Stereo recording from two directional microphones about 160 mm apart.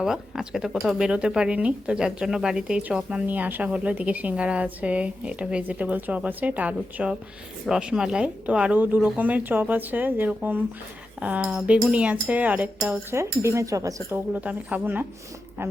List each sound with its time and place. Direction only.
0.0 s speech: 5° right (ahead or behind); by 14.2 s 20° right (ahead or behind)
14.3 s speech: 10° right (ahead or behind)